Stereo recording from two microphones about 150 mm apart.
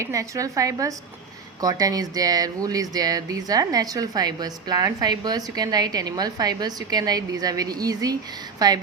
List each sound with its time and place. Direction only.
0.0 s speech: 20° right (ahead or behind)